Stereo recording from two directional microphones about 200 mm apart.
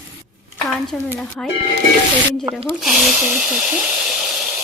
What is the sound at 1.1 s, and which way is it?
Speech, 5° left (ahead or behind).